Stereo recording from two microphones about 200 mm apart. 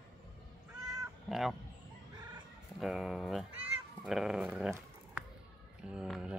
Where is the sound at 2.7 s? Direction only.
5° right (ahead or behind).